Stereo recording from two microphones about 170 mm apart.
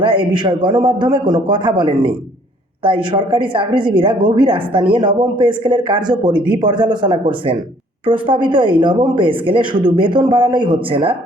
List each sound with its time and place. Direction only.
0.0 s speech: 30° right (ahead or behind)